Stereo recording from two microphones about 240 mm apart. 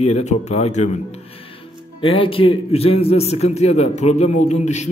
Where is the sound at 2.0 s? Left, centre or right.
Left.